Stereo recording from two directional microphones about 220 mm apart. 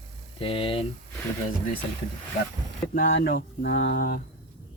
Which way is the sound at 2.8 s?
40° left (ahead or behind).